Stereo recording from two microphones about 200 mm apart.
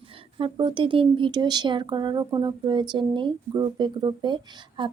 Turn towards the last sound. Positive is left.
turn(degrees=-25)  # may be behind; listen again after turning